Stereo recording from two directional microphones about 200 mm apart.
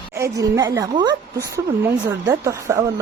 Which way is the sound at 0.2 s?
15° right (ahead or behind).